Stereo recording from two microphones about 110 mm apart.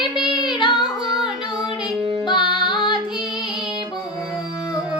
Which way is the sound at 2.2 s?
45° left (ahead or behind).